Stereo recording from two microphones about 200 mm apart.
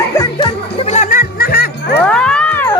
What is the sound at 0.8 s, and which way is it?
Music, 35° left (ahead or behind).